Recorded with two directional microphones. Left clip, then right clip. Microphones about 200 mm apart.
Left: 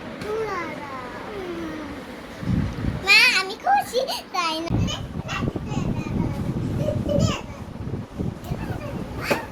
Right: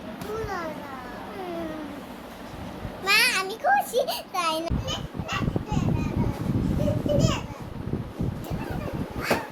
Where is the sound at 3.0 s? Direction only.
25° right (ahead or behind).